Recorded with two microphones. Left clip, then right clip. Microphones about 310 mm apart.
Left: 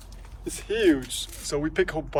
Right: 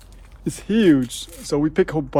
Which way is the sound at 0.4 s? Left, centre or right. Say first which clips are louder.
Right 5 dB; right.